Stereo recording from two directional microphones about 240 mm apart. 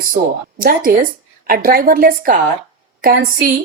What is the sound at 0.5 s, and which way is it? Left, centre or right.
Speech, right.